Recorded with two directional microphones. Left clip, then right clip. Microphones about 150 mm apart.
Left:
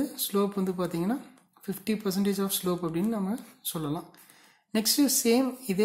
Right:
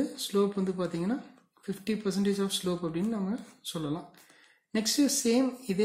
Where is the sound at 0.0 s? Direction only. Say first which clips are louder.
Even; 35° left (ahead or behind).